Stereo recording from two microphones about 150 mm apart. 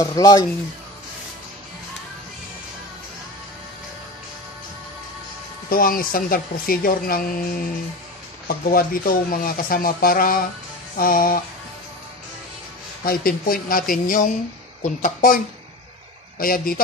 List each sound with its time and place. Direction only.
0.0 s speech: 25° left (ahead or behind)
5.7 s speech: 75° left (ahead or behind)
8.5 s speech: 75° left (ahead or behind)
13.0 s speech: 80° left; by 15.4 s 60° left (ahead or behind)
16.3 s speech: 75° left (ahead or behind)